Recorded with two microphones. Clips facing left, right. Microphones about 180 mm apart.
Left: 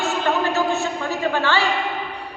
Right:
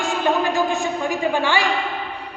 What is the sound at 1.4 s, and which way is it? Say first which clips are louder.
Speech: even; 15° right (ahead or behind).